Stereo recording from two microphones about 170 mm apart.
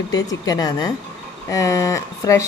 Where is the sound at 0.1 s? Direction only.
20° left (ahead or behind).